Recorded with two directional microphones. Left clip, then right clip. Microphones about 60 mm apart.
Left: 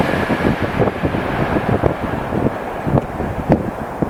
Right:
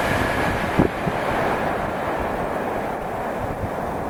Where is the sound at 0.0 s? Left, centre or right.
Centre.